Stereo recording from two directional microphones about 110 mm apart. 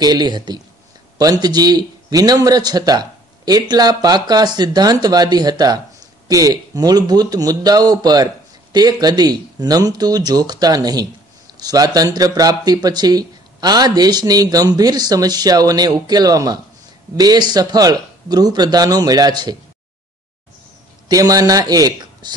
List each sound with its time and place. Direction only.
0.0 s a man's voice: 40° right (ahead or behind)
21.1 s speech: 35° right (ahead or behind)